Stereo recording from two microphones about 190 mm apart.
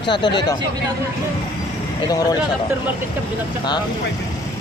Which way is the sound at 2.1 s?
20° left (ahead or behind).